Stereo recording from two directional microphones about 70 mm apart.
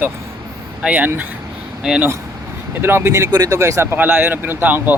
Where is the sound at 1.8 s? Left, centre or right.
Centre.